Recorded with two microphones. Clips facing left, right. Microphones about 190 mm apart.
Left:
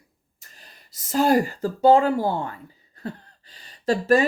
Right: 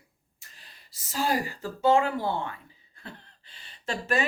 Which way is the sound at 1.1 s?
50° left (ahead or behind).